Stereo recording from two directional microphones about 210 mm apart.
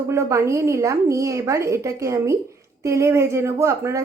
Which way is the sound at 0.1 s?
15° right (ahead or behind).